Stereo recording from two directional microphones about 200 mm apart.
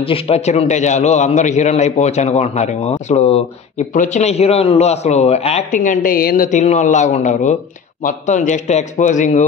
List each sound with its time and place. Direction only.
0.0 s speech: 30° left (ahead or behind)